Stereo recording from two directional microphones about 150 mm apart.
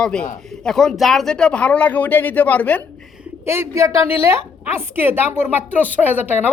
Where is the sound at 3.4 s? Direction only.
15° right (ahead or behind).